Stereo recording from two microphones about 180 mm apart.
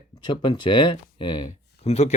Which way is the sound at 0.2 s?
25° left (ahead or behind).